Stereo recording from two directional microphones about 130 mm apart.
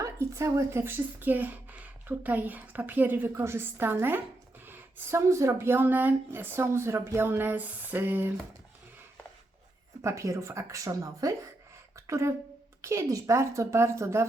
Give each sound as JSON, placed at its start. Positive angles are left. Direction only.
{"t": 0.0, "sound": "speech", "side_deg": -20}
{"t": 10.0, "sound": "a woman's voice", "side_deg": -25}
{"t": 11.9, "sound": "a sound", "side_deg": -20}
{"t": 12.8, "sound": "a woman's voice", "side_deg": -20}